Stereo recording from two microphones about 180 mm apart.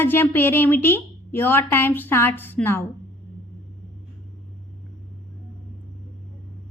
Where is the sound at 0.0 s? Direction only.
10° left (ahead or behind).